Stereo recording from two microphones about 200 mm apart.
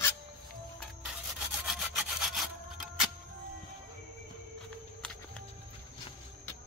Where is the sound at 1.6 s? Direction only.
Centre (ahead or behind).